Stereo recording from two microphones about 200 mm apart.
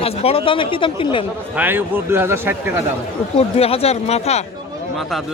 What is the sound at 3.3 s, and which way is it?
Speech, 30° left (ahead or behind).